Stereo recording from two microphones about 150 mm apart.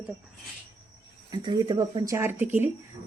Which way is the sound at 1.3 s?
30° right (ahead or behind).